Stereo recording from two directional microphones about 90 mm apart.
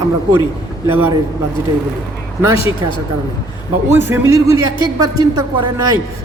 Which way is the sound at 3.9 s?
25° right (ahead or behind).